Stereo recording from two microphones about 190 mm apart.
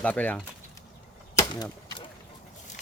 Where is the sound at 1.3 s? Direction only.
20° left (ahead or behind).